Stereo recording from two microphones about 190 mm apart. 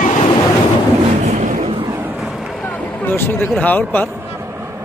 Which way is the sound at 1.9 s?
10° right (ahead or behind).